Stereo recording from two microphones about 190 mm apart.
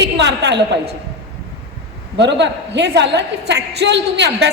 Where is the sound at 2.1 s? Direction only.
65° right (ahead or behind).